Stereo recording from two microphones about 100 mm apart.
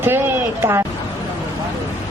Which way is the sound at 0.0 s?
20° right (ahead or behind).